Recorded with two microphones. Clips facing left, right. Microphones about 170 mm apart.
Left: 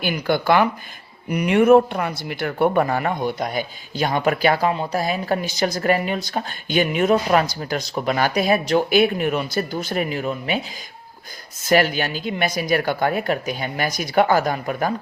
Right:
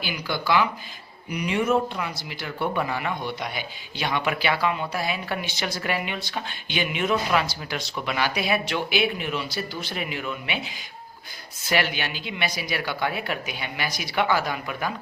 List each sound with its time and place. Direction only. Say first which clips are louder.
0.0 s speech: left 8 dB; 55° left (ahead or behind)
11.6 s speech: left 7 dB; 45° left (ahead or behind)